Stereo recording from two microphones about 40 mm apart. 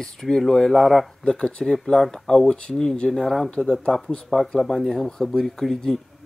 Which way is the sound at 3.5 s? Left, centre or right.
Centre.